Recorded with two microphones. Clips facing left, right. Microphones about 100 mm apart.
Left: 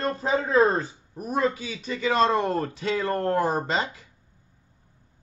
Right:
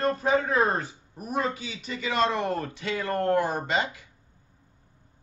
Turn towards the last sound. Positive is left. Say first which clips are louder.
# left 1 dB
turn(degrees=30)  # may be behind; listen again after turning